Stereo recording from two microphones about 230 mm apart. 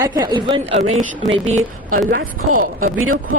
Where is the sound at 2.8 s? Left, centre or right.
Right.